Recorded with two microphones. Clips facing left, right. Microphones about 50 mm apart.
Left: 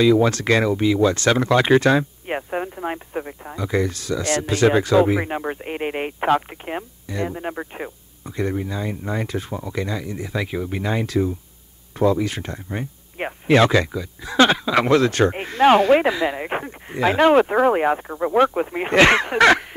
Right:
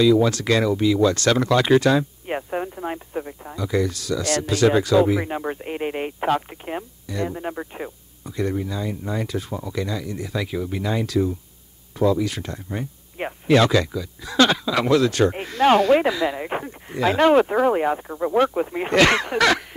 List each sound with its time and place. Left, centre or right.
0.0 s speech: left